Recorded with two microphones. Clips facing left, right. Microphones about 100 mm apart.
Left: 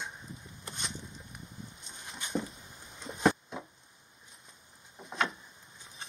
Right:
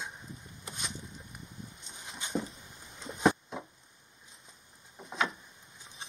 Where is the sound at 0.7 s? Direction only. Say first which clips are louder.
Even; centre (ahead or behind).